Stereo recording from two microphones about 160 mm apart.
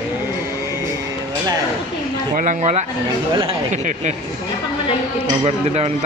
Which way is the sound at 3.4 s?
35° right (ahead or behind).